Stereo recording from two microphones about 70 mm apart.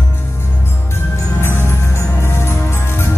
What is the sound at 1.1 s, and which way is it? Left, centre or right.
Music, left.